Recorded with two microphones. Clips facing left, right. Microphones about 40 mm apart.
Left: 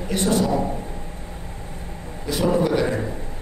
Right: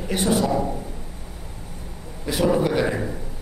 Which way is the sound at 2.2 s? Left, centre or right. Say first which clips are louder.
Even; centre.